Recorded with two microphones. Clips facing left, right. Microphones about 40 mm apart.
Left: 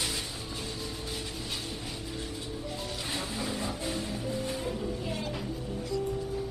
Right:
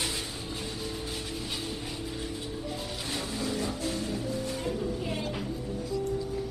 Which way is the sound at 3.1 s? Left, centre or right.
Centre.